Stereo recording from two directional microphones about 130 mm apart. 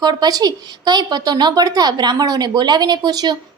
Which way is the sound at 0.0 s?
30° right (ahead or behind).